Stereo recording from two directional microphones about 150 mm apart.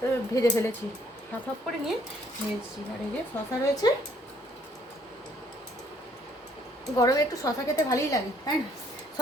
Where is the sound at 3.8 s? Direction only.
30° left (ahead or behind).